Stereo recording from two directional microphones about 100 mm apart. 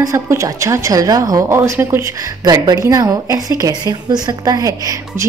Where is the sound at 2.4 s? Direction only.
40° right (ahead or behind).